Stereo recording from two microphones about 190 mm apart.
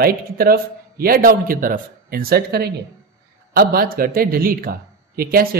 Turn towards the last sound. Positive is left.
turn(degrees=-50)  # may be behind; listen again after turning